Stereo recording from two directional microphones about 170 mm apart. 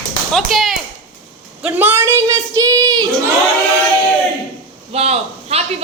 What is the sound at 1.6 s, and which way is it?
A woman's voice, 10° right (ahead or behind).